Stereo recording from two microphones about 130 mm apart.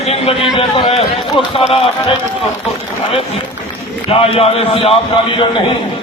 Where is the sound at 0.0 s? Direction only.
50° left (ahead or behind).